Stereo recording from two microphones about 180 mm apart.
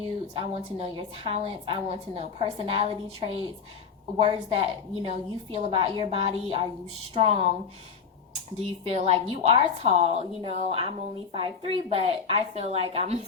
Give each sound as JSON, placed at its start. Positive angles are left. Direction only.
{"t": 0.3, "sound": "a woman's voice", "side_deg": -35}
{"t": 8.8, "sound": "a woman's voice", "side_deg": -35}